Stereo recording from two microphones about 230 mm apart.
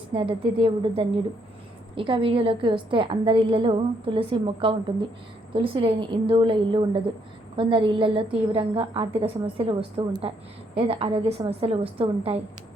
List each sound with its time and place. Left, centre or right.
0.1 s a woman's voice: right